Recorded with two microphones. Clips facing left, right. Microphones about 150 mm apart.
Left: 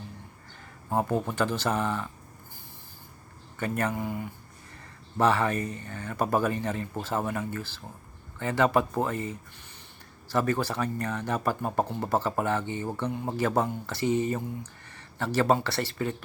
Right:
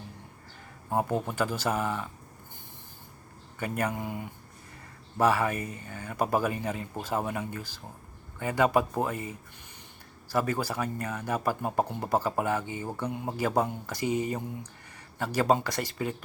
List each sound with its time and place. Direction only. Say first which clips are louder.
0.9 s speech: left 1 dB; 10° right (ahead or behind)
3.6 s speech: left 2 dB; 10° right (ahead or behind)